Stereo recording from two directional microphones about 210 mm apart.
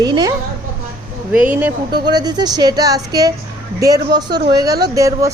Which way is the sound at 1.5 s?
10° right (ahead or behind).